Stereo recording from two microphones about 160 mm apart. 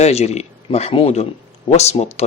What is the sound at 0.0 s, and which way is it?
Speech, 40° left (ahead or behind).